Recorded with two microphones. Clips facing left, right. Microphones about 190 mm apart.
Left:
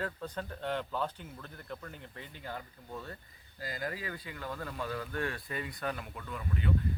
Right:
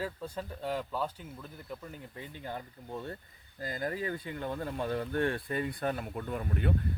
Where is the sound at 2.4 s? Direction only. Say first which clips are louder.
Right 2 dB; 25° right (ahead or behind).